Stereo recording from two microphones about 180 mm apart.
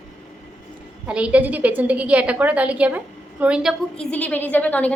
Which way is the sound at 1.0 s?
5° right (ahead or behind).